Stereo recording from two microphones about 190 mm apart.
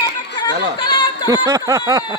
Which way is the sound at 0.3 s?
25° left (ahead or behind).